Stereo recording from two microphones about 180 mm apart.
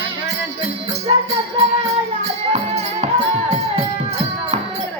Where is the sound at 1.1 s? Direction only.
30° right (ahead or behind).